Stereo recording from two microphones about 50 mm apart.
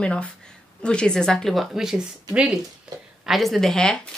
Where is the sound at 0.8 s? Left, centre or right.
Centre.